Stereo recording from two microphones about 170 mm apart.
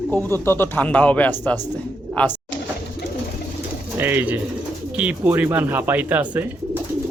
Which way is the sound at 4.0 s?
10° right (ahead or behind).